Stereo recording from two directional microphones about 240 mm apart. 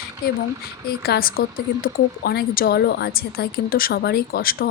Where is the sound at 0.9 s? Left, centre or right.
Left.